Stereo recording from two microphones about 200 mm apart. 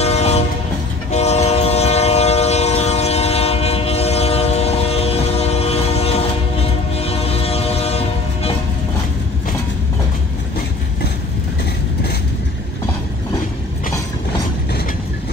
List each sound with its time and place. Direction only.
0.0 s train: 30° left (ahead or behind)